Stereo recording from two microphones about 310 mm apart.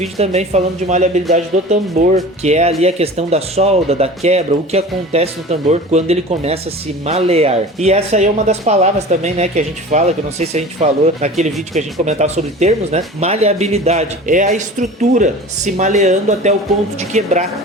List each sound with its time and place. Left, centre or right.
0.2 s speech: right